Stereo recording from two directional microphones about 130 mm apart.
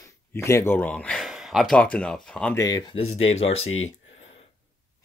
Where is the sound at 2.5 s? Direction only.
30° left (ahead or behind).